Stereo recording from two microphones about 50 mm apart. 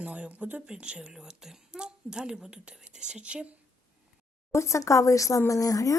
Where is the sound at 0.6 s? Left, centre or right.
Centre.